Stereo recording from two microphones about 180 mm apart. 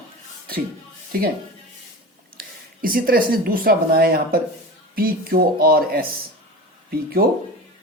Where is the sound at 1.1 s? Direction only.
55° right (ahead or behind).